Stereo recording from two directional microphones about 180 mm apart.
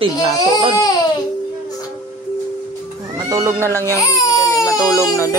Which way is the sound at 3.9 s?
20° left (ahead or behind).